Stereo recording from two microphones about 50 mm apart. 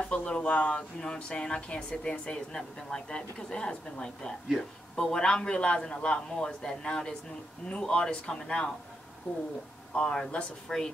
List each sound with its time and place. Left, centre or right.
0.0 s a man's voice: left
9.9 s a man's voice: centre